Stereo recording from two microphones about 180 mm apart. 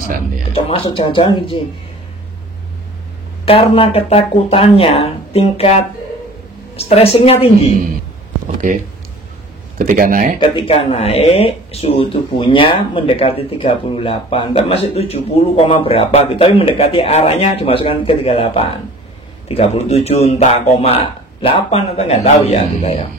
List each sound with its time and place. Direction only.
0.5 s speech: 30° left (ahead or behind)
3.4 s speech: 30° left (ahead or behind)
9.8 s speech: 50° right (ahead or behind)
10.4 s speech: 30° left (ahead or behind)